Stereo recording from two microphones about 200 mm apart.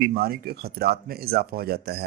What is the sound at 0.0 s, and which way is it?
A man's voice, 50° right (ahead or behind).